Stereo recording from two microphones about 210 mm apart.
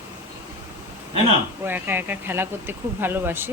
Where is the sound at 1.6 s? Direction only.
10° right (ahead or behind).